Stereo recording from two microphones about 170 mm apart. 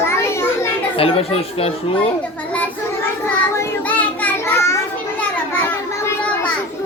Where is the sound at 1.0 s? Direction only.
35° left (ahead or behind).